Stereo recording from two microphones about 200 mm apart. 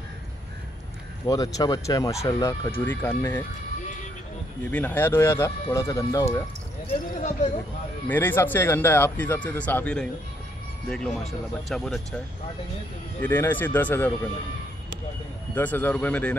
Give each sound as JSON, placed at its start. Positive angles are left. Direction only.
{"t": 1.2, "sound": "speech", "side_deg": 15}
{"t": 4.6, "sound": "speech", "side_deg": 10}
{"t": 7.2, "sound": "speech", "side_deg": 35}
{"t": 8.1, "sound": "speech", "side_deg": 10}
{"t": 11.7, "sound": "speech", "side_deg": 0}
{"t": 13.2, "sound": "speech", "side_deg": 10}
{"t": 15.5, "sound": "speech", "side_deg": 10}